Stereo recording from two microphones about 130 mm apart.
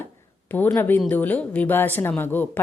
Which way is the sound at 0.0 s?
15° left (ahead or behind).